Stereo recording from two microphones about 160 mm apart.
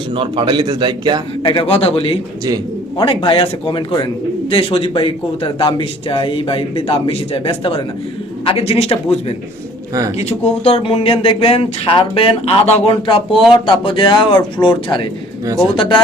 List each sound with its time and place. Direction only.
0.1 s a man's voice: 35° right (ahead or behind)
1.5 s speech: 35° left (ahead or behind)
10.2 s speech: 40° left (ahead or behind)